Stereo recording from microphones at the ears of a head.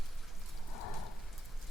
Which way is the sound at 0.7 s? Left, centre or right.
Left.